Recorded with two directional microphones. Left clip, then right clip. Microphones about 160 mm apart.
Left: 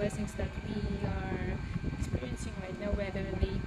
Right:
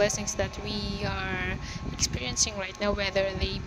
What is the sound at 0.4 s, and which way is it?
Speech, 50° right (ahead or behind).